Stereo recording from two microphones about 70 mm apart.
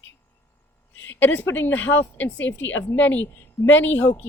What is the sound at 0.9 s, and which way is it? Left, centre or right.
A woman's voice, left.